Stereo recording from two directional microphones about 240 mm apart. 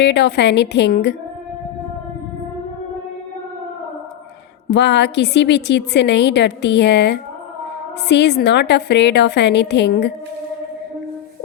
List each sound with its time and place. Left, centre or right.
0.0 s a woman's voice: left
4.7 s a woman's voice: left